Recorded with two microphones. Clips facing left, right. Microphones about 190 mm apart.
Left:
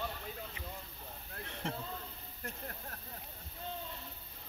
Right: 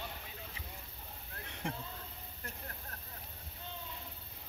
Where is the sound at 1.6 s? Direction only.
15° right (ahead or behind).